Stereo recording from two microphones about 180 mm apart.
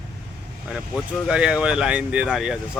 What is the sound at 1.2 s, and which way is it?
Speech, 5° right (ahead or behind).